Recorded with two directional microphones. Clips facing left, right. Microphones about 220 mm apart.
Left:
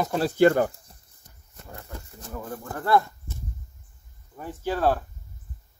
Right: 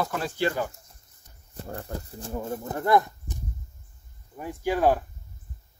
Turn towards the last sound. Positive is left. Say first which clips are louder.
# right 1 dB
turn(degrees=-15)  # may be behind; listen again after turning